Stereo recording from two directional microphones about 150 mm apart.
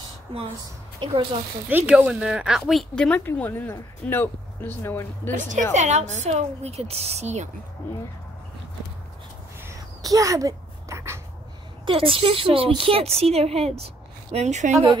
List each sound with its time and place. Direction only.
1.7 s speech: 15° right (ahead or behind); by 5.3 s 15° left (ahead or behind)
5.5 s a woman's voice: 55° right (ahead or behind)
9.6 s a sound: 20° right (ahead or behind)
11.8 s a woman's voice: 35° right (ahead or behind)